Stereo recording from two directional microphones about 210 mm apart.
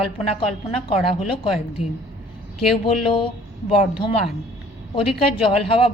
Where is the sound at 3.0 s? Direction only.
25° left (ahead or behind).